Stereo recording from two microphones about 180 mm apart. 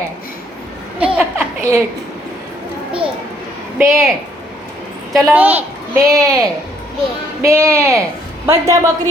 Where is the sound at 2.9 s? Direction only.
30° right (ahead or behind).